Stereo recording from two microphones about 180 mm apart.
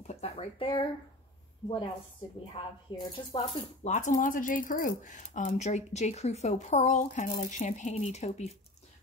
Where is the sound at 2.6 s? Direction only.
30° left (ahead or behind).